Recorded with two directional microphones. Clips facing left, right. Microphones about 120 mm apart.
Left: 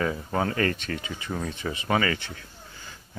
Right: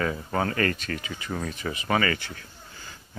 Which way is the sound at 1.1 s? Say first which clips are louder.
Even; 5° left (ahead or behind).